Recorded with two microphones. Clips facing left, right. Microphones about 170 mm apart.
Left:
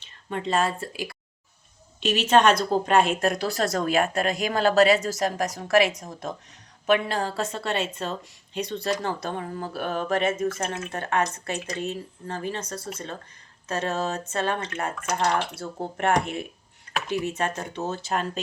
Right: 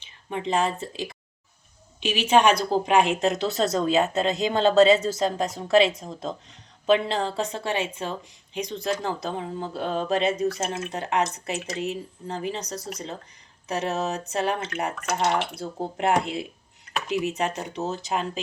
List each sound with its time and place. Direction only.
0.3 s a woman's voice: 15° right (ahead or behind)